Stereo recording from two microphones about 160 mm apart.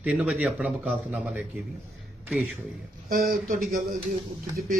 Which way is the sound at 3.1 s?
60° right (ahead or behind).